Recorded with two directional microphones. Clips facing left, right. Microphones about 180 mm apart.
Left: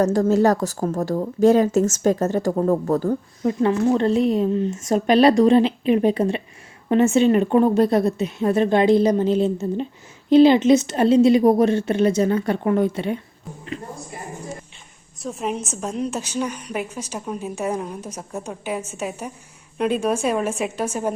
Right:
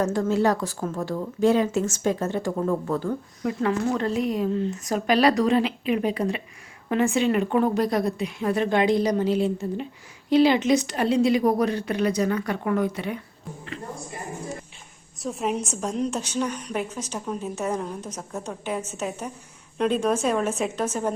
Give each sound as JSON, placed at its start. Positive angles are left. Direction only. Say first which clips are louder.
{"t": 0.0, "sound": "a woman's voice", "louder": "left 5 dB", "side_deg": 40}
{"t": 3.4, "sound": "a woman's voice", "louder": "left 5 dB", "side_deg": 25}
{"t": 15.2, "sound": "a woman's voice", "louder": "even", "side_deg": 0}